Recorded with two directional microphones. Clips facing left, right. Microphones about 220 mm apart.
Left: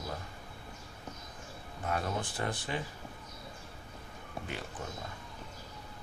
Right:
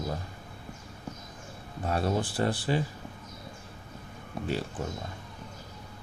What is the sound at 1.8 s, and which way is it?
Speech, 35° right (ahead or behind).